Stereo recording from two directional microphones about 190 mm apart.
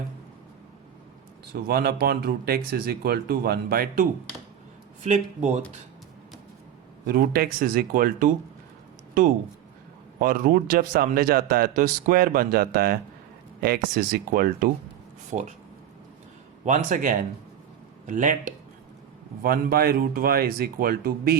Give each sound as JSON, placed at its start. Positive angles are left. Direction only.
{"t": 1.6, "sound": "a man's voice", "side_deg": -55}
{"t": 7.1, "sound": "a man's voice", "side_deg": -50}
{"t": 10.2, "sound": "a man's voice", "side_deg": -45}
{"t": 15.3, "sound": "speech", "side_deg": -35}
{"t": 16.6, "sound": "a man's voice", "side_deg": -40}